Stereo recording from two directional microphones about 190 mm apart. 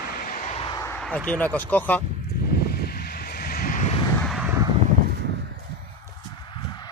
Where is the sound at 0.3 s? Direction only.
35° left (ahead or behind).